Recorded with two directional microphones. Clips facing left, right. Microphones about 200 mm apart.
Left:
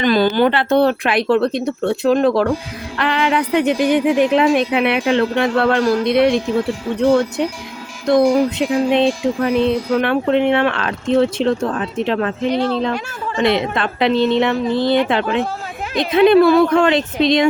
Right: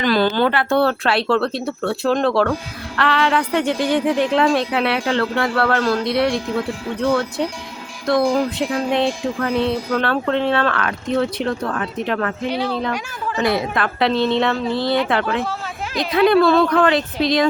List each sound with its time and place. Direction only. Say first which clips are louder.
0.0 s a woman's voice: left 3 dB; 15° left (ahead or behind)
12.5 s speech: left 6 dB; 10° right (ahead or behind)
13.3 s a woman's voice: left 3 dB; 25° left (ahead or behind)